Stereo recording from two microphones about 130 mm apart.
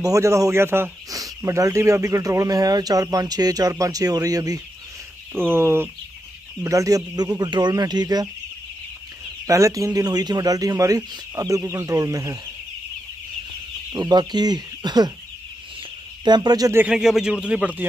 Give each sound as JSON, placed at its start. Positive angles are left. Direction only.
{"t": 0.0, "sound": "speech", "side_deg": -25}
{"t": 5.3, "sound": "speech", "side_deg": -15}
{"t": 9.5, "sound": "speech", "side_deg": -25}
{"t": 13.9, "sound": "speech", "side_deg": -35}
{"t": 16.3, "sound": "speech", "side_deg": -30}
{"t": 16.7, "sound": "speech", "side_deg": -5}